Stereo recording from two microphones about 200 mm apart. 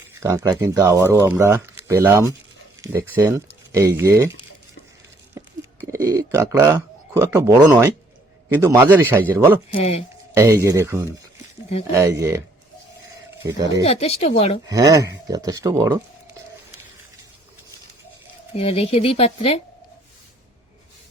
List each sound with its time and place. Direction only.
0.1 s speech: 15° right (ahead or behind)
5.9 s speech: 15° right (ahead or behind)
9.6 s speech: 30° left (ahead or behind)
10.3 s speech: 15° right (ahead or behind)
13.4 s speech: 15° right (ahead or behind)
13.8 s speech: 30° left (ahead or behind)
14.7 s speech: 15° right (ahead or behind)
18.5 s speech: 30° left (ahead or behind)